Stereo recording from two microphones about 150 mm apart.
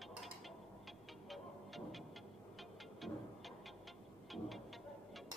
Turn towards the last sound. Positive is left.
turn(degrees=0)  # may be behind; listen again after turning